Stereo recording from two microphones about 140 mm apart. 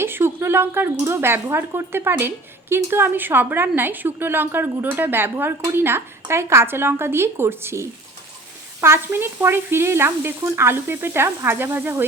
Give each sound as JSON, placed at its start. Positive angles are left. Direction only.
{"t": 0.0, "sound": "speech", "side_deg": -15}